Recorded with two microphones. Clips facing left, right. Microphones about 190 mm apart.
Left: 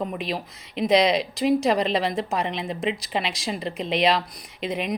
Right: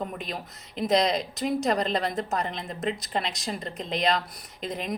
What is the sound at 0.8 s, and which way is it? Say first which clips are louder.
Speech: left 4 dB; 85° left.